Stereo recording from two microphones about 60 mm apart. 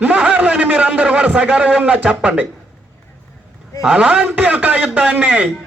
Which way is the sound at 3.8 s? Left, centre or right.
Centre.